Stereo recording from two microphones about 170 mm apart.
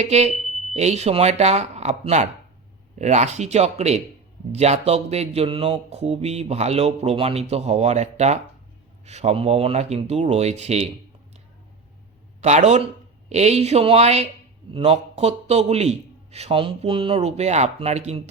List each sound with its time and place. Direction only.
0.0 s speech: 40° right (ahead or behind)
12.4 s speech: 40° right (ahead or behind)